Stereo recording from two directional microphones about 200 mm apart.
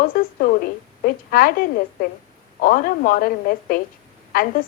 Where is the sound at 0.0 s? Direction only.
45° left (ahead or behind).